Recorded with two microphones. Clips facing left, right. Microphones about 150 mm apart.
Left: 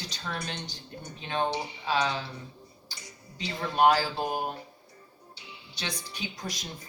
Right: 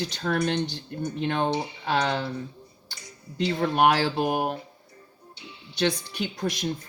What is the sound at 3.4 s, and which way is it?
Speech, 70° right (ahead or behind).